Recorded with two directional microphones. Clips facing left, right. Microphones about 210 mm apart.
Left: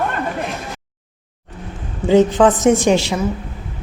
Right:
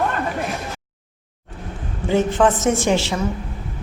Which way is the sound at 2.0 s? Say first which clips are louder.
Left 5 dB; 15° left (ahead or behind).